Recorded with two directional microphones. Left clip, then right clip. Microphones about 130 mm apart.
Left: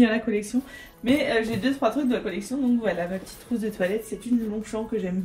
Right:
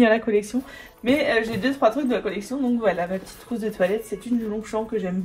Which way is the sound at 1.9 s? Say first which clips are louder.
Right 4 dB; 50° right (ahead or behind).